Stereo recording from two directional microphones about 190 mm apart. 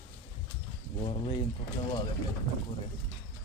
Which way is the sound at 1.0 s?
25° left (ahead or behind).